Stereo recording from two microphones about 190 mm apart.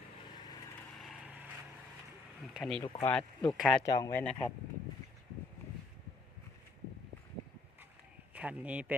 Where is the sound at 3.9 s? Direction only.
20° left (ahead or behind).